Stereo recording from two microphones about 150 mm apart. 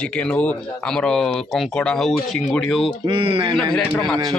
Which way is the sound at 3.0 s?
35° right (ahead or behind).